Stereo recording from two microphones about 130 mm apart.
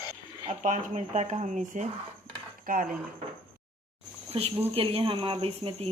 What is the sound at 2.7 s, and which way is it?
Speech, 90° right.